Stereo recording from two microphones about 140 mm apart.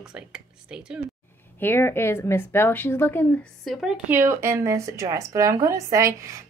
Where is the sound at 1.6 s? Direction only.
15° left (ahead or behind).